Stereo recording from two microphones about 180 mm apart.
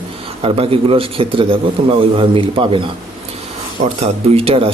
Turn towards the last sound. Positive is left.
turn(degrees=-35)  # may be behind; listen again after turning